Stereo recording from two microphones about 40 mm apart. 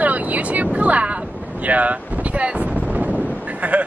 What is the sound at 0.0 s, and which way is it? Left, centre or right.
Speech, right.